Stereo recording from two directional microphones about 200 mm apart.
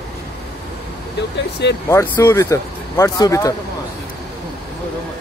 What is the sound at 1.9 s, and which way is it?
Speech, 15° left (ahead or behind).